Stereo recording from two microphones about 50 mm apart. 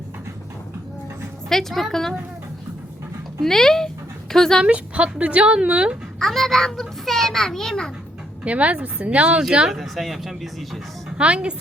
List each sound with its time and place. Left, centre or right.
1.5 s a woman's voice: centre
3.4 s a woman's voice: centre
4.6 s a woman's voice: right
6.1 s a child's voice: centre
8.4 s a woman's voice: right
9.4 s speech: centre
9.8 s speech: centre
11.2 s a woman's voice: right